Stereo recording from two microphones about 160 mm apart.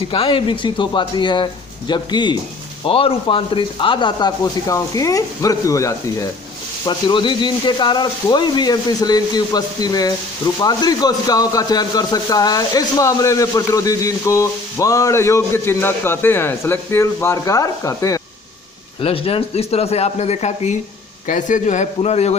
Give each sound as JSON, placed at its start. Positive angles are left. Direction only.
{"t": 0.1, "sound": "speech", "side_deg": 30}
{"t": 6.8, "sound": "speech", "side_deg": 30}
{"t": 19.0, "sound": "a man's voice", "side_deg": 35}